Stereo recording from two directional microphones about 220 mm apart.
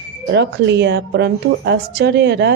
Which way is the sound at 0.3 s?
50° right (ahead or behind).